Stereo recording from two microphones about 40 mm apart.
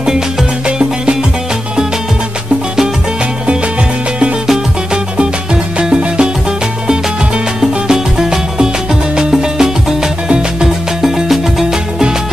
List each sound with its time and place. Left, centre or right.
0.0 s music: centre
0.7 s music: right
4.9 s music: right
7.9 s music: centre